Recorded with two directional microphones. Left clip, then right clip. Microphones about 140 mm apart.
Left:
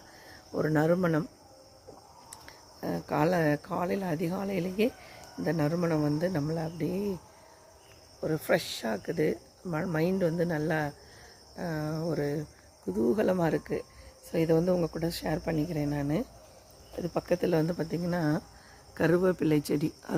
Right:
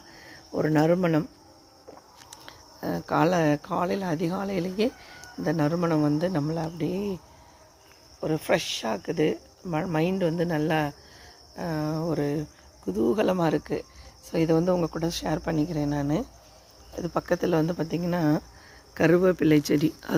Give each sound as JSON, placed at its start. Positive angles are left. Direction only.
{"t": 0.5, "sound": "speech", "side_deg": -5}
{"t": 2.3, "sound": "speech", "side_deg": 0}
{"t": 8.2, "sound": "speech", "side_deg": -10}